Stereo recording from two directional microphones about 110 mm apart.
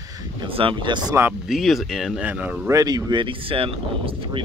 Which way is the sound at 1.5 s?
Centre (ahead or behind).